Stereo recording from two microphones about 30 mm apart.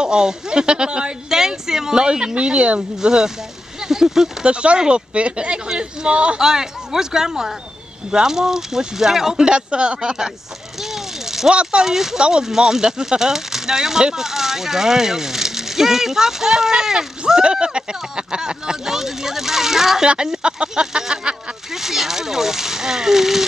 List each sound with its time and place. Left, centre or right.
0.0 s speech: right
1.3 s speech: centre; by 2.8 s right
3.0 s speech: right
4.5 s speech: right
4.7 s speech: right
5.1 s speech: right
6.3 s speech: centre
9.4 s speech: right
10.8 s a sound: centre
11.8 s speech: centre
12.2 s speech: right
12.4 s speech: centre
20.4 s speech: right
21.7 s speech: centre